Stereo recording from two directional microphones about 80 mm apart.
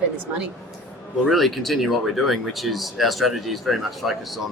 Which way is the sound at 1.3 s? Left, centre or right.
Centre.